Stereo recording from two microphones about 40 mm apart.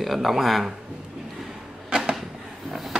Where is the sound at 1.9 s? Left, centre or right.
Centre.